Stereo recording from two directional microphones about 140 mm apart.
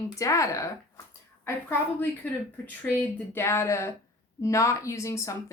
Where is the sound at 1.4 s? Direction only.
15° left (ahead or behind).